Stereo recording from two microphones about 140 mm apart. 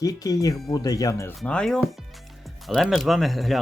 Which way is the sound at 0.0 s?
25° left (ahead or behind).